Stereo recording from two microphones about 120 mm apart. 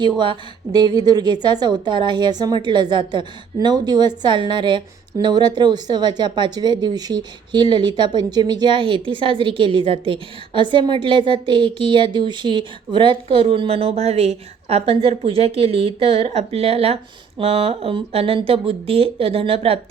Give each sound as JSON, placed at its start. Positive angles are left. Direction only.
{"t": 0.2, "sound": "a woman's voice", "side_deg": -40}